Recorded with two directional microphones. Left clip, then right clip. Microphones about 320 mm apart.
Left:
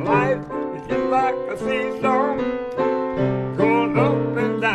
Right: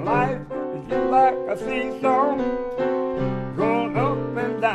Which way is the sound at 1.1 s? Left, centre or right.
Centre.